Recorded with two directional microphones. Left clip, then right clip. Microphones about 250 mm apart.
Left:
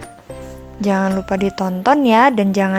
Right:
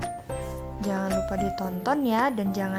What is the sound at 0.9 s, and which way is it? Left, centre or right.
Speech, left.